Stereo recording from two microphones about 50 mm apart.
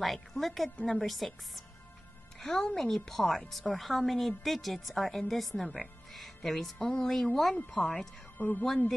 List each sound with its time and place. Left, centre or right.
0.0 s a woman's voice: centre
2.3 s music: centre
2.6 s a woman's voice: centre
8.4 s a woman's voice: left